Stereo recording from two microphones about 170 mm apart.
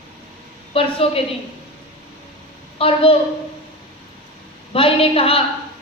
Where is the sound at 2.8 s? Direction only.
35° left (ahead or behind).